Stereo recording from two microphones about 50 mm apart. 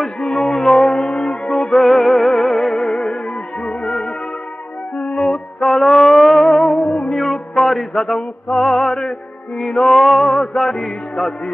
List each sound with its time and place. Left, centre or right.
0.4 s music: centre
1.7 s music: centre
2.8 s music: centre
4.9 s music: left
5.6 s a sound: centre
6.4 s music: centre